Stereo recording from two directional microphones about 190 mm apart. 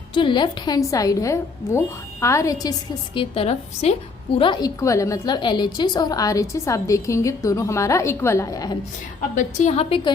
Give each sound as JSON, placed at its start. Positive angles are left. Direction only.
{"t": 0.1, "sound": "a woman's voice", "side_deg": 25}
{"t": 3.2, "sound": "a woman's voice", "side_deg": 30}
{"t": 9.3, "sound": "a woman's voice", "side_deg": 40}